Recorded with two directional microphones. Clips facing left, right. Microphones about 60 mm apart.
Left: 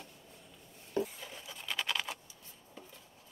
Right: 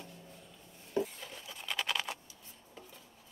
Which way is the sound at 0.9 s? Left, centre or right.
Centre.